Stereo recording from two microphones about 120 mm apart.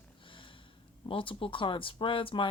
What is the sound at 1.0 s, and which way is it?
Speech, 50° left (ahead or behind).